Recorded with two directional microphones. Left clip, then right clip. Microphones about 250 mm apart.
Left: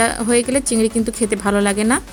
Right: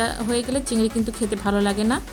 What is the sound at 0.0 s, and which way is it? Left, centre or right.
A woman's voice, left.